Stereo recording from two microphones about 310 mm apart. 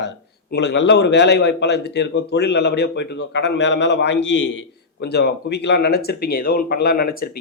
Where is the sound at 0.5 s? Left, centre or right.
Left.